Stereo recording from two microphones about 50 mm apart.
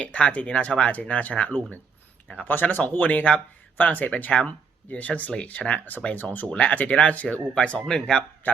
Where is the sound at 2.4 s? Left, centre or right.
Left.